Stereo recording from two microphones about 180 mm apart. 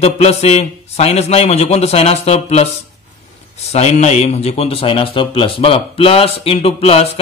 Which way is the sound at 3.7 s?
40° left (ahead or behind).